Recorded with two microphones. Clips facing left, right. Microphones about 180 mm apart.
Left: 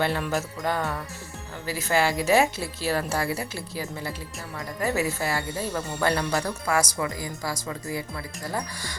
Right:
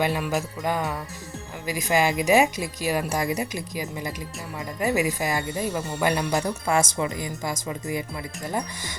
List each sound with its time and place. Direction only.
0.0 s a woman's voice: 15° right (ahead or behind)